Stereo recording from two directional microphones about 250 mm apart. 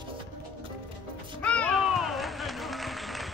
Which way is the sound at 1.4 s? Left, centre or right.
Centre.